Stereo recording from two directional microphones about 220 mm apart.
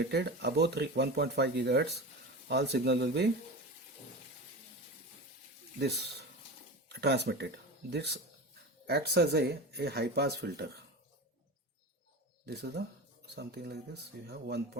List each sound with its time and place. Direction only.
0.0 s speech: 50° right (ahead or behind)
6.8 s speech: 50° right (ahead or behind)
12.5 s speech: 50° right (ahead or behind)